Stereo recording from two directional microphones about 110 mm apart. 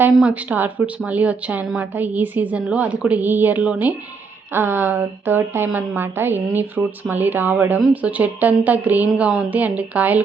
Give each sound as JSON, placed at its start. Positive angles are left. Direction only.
{"t": 0.0, "sound": "speech", "side_deg": -10}